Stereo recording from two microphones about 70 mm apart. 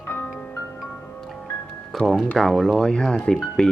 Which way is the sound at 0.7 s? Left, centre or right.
Centre.